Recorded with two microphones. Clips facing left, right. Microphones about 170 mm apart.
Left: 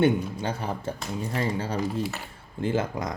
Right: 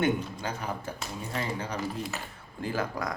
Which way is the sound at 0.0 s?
30° left (ahead or behind).